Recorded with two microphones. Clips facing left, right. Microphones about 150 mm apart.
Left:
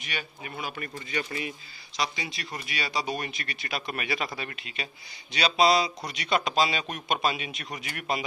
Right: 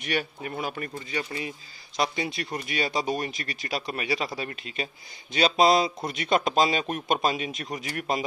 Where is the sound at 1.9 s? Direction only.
50° right (ahead or behind).